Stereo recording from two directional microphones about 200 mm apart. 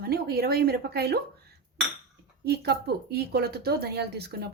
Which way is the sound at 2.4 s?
55° right (ahead or behind).